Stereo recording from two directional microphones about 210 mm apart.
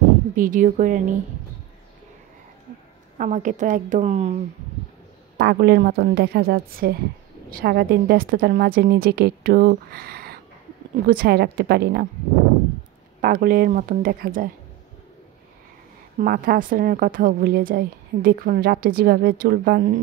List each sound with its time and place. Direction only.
0.4 s a woman's voice: 40° right (ahead or behind)
3.2 s a woman's voice: 35° right (ahead or behind)
5.4 s a woman's voice: 50° right (ahead or behind)
13.2 s a woman's voice: 45° right (ahead or behind)
16.2 s a woman's voice: 40° right (ahead or behind)